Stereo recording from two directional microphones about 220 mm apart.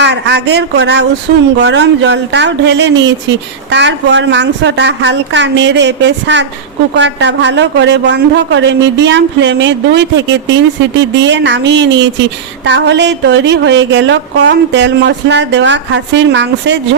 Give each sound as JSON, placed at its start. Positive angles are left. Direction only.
{"t": 0.0, "sound": "a woman's voice", "side_deg": -50}